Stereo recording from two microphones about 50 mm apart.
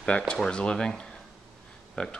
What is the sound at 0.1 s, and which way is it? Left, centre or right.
Speech, left.